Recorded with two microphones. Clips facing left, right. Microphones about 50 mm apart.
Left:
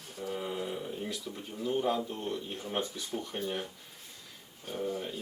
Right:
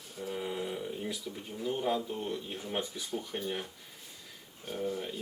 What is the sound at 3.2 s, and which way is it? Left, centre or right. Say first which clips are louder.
Speech: left 1 dB; centre.